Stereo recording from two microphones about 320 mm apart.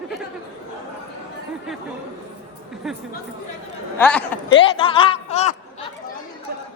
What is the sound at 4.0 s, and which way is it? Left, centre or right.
Speech, centre.